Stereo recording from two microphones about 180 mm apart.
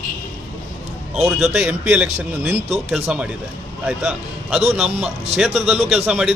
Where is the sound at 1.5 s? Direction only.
5° right (ahead or behind).